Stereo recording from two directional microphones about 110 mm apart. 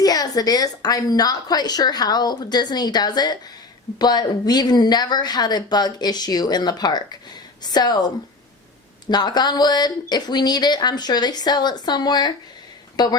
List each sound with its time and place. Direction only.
0.0 s a woman's voice: 35° left (ahead or behind)
9.0 s a woman's voice: 40° left (ahead or behind)